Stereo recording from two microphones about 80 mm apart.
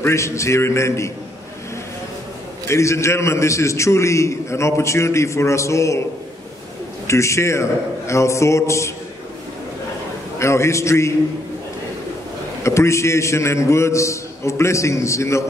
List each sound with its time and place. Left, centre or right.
0.0 s a man's voice: left
2.7 s a man's voice: left
7.1 s a man's voice: left
10.4 s a man's voice: left
12.6 s a man's voice: left